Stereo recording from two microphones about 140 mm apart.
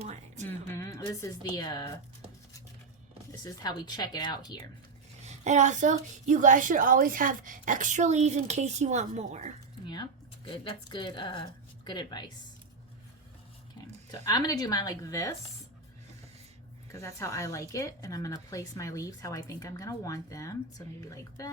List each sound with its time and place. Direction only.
0.0 s music: 50° right (ahead or behind)
0.4 s a woman's voice: 15° left (ahead or behind)
3.4 s a woman's voice: 30° left (ahead or behind)
5.2 s a woman's voice: 55° right (ahead or behind)
9.8 s speech: 30° left (ahead or behind)
14.1 s a woman's voice: 25° left (ahead or behind)
16.9 s a woman's voice: 20° left (ahead or behind)